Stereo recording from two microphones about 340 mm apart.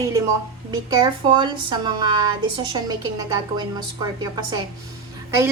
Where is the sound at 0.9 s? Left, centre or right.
Centre.